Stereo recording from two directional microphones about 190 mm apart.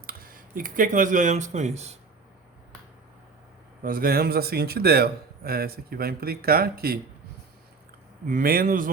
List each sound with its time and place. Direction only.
0.0 s speech: 50° right (ahead or behind)
3.8 s a man's voice: 50° right (ahead or behind)
8.3 s a man's voice: 50° right (ahead or behind)